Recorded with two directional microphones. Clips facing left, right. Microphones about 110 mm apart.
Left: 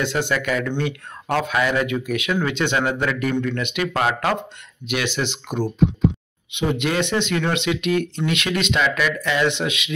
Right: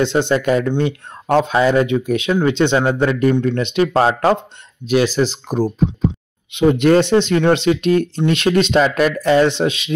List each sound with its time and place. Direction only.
0.0 s speech: 25° right (ahead or behind)